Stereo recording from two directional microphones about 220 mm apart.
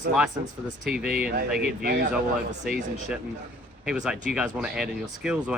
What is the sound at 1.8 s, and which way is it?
Speech, 45° right (ahead or behind).